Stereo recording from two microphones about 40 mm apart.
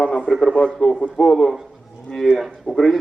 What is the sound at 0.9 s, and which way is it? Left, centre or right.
Speech, left.